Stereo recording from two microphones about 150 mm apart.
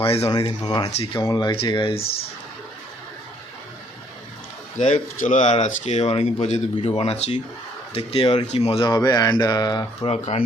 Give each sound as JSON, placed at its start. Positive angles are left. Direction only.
{"t": 0.0, "sound": "speech", "side_deg": 40}
{"t": 0.3, "sound": "speech", "side_deg": 25}
{"t": 4.8, "sound": "speech", "side_deg": 55}
{"t": 8.8, "sound": "speech", "side_deg": 25}
{"t": 10.1, "sound": "speech", "side_deg": 45}